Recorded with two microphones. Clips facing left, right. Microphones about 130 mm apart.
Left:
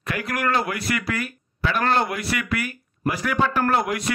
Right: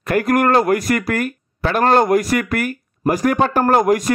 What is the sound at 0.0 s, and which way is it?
Speech, 50° right (ahead or behind).